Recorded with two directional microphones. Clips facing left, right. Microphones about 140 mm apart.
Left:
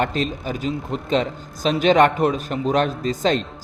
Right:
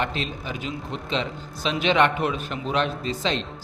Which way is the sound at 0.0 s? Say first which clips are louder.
Left 6 dB; 40° left (ahead or behind).